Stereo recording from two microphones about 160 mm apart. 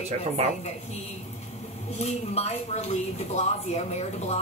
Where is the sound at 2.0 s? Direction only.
40° left (ahead or behind).